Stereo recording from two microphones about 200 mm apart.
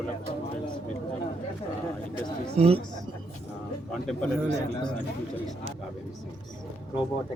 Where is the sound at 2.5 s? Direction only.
30° right (ahead or behind).